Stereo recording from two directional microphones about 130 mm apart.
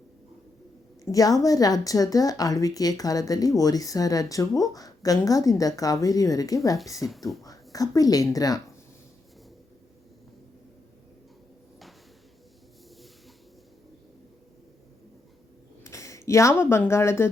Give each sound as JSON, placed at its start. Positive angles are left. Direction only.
{"t": 1.1, "sound": "a woman's voice", "side_deg": 25}
{"t": 15.8, "sound": "speech", "side_deg": 25}